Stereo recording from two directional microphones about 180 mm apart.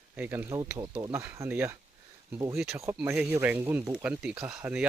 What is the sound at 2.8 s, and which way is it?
Speech, 15° right (ahead or behind).